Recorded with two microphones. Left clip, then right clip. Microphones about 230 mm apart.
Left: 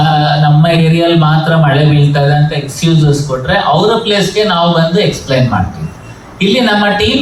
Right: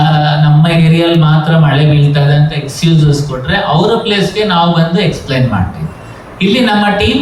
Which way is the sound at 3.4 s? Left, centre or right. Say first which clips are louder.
Left 2 dB; left.